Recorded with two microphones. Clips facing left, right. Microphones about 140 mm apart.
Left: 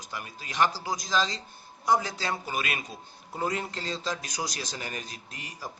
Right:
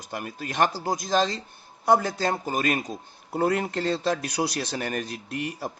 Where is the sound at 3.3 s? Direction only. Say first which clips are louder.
Right 7 dB; 60° right (ahead or behind).